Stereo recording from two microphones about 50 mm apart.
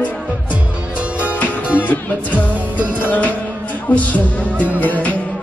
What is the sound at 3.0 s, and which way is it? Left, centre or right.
Music, left.